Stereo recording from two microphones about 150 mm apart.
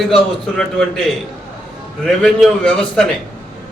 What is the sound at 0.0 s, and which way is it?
A man's voice, 5° left (ahead or behind).